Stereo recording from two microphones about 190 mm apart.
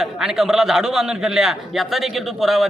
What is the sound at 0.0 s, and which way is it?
A man's voice, centre (ahead or behind).